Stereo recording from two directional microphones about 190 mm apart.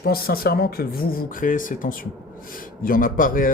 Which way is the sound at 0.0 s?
50° left (ahead or behind).